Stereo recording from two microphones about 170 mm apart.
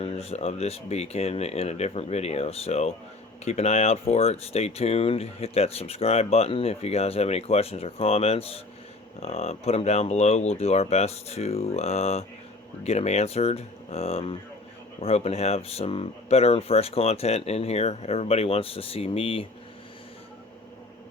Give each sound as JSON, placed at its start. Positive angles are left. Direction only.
{"t": 0.0, "sound": "speech", "side_deg": 35}